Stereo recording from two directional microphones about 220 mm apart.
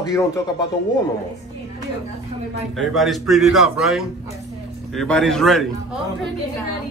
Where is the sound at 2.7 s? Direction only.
Centre (ahead or behind).